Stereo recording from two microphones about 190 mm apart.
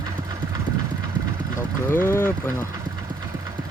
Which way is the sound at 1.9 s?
10° left (ahead or behind).